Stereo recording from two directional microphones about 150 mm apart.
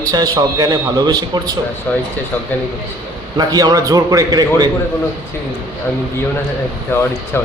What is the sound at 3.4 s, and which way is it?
Speech, 25° right (ahead or behind).